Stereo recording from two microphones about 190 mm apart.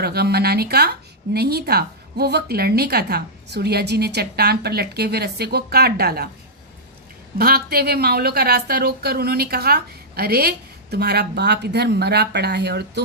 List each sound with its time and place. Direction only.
0.0 s speech: 60° right (ahead or behind)
7.3 s speech: 55° right (ahead or behind)